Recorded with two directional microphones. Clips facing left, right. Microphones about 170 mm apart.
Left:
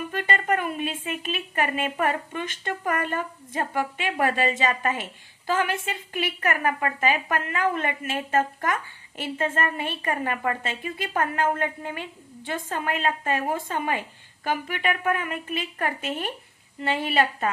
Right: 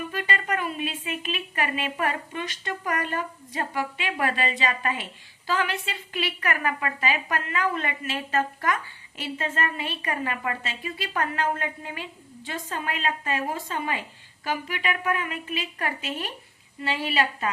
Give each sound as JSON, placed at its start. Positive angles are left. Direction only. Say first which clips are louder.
{"t": 0.1, "sound": "a woman's voice", "louder": "left 6 dB", "side_deg": 50}